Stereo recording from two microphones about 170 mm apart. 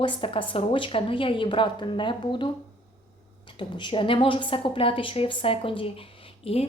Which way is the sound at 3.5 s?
30° left (ahead or behind).